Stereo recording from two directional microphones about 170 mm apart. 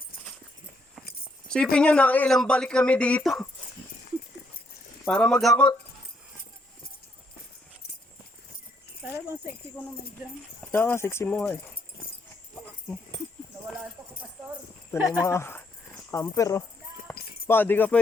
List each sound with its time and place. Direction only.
1.7 s speech: 5° left (ahead or behind)
5.0 s speech: 5° left (ahead or behind)
10.7 s speech: 15° left (ahead or behind)
14.9 s speech: 5° right (ahead or behind)
15.2 s speech: 15° left (ahead or behind)
17.1 s keys jangling: 10° left (ahead or behind)
17.4 s speech: 10° left (ahead or behind)